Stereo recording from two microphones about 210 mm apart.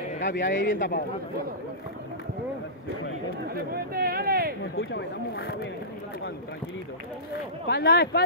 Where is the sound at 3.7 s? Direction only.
45° right (ahead or behind).